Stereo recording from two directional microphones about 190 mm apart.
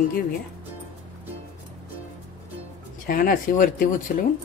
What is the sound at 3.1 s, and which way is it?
Speech, 50° left (ahead or behind).